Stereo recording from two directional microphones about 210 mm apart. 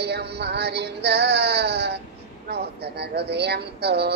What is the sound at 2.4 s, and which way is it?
Speech, 50° right (ahead or behind).